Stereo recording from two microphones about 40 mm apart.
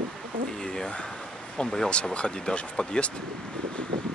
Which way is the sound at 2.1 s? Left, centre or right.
Left.